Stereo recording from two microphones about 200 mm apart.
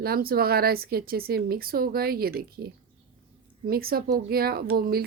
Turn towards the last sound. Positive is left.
turn(degrees=-50)  # may be behind; listen again after turning